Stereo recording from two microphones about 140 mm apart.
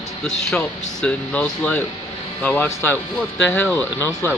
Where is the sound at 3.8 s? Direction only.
15° left (ahead or behind).